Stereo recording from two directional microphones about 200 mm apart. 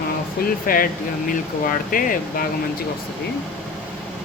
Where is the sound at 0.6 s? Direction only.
45° left (ahead or behind).